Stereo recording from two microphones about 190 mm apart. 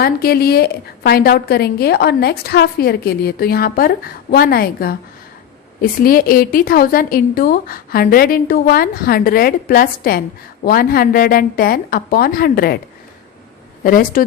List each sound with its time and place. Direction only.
0.0 s a woman's voice: 55° left (ahead or behind)
13.8 s a woman's voice: 45° left (ahead or behind)